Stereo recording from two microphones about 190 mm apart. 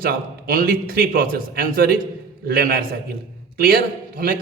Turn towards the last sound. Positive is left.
turn(degrees=-50)  # may be behind; listen again after turning